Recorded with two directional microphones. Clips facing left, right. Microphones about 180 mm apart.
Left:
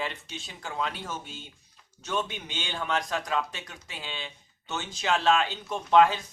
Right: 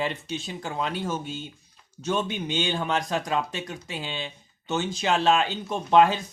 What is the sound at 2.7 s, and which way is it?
Speech, 25° right (ahead or behind).